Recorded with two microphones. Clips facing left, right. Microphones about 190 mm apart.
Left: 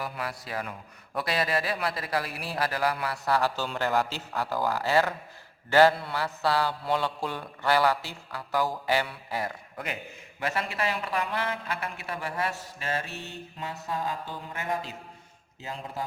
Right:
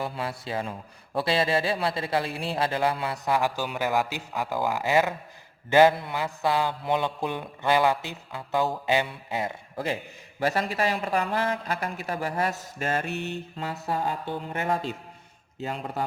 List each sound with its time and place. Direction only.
0.0 s a man's voice: 25° right (ahead or behind); by 16.0 s 65° right (ahead or behind)